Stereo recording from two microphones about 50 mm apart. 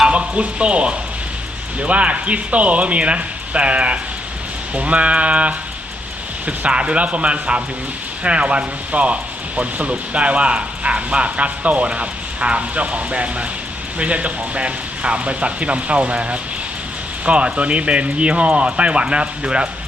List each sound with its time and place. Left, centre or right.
0.0 s speech: right